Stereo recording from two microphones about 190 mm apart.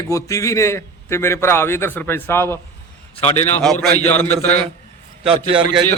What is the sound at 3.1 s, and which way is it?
Speech, 30° left (ahead or behind).